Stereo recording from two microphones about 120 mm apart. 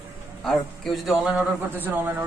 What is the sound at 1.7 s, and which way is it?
Speech, 15° right (ahead or behind).